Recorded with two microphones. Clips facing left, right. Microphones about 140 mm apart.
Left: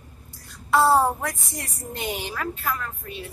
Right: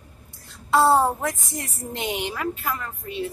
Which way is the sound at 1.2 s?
20° right (ahead or behind).